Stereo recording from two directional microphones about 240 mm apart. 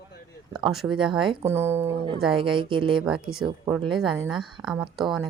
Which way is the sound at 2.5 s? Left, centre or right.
Right.